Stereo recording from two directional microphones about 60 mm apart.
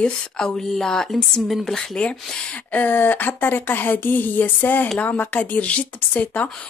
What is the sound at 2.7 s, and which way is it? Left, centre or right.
Speech, left.